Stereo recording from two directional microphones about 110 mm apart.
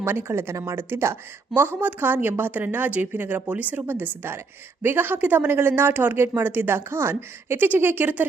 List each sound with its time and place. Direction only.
0.0 s a woman's voice: 20° right (ahead or behind)